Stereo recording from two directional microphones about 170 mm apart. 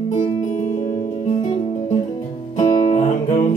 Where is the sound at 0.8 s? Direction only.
40° left (ahead or behind).